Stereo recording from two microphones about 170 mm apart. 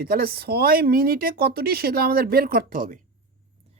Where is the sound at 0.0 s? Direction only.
60° right (ahead or behind).